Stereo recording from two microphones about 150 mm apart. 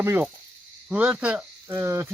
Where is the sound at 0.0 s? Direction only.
15° right (ahead or behind).